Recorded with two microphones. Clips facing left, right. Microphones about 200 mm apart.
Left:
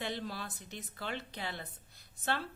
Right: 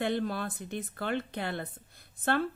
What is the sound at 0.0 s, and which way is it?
A woman's voice, 55° right (ahead or behind).